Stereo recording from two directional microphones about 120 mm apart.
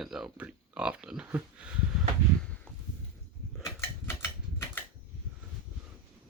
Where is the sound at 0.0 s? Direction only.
5° right (ahead or behind).